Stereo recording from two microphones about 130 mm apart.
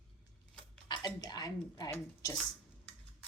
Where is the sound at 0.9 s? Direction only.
35° left (ahead or behind).